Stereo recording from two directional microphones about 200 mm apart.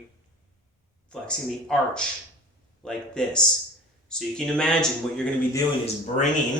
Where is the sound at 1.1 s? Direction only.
5° left (ahead or behind).